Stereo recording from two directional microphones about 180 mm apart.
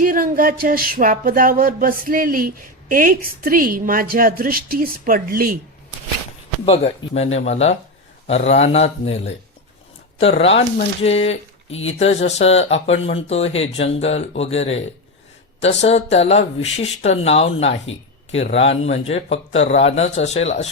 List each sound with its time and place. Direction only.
0.0 s a sound: 50° right (ahead or behind)
6.7 s speech: 35° left (ahead or behind)
11.8 s speech: 35° left (ahead or behind)